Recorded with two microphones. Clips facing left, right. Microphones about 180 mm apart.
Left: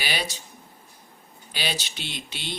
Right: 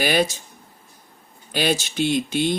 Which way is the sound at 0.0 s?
50° right (ahead or behind).